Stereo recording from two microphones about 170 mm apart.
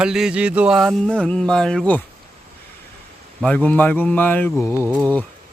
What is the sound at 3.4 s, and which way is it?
Speech, 10° left (ahead or behind).